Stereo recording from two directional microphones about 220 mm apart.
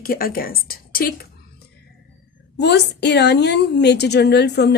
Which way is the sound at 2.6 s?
50° left (ahead or behind).